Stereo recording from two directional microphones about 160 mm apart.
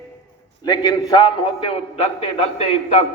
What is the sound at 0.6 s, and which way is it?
A man's voice, 25° left (ahead or behind).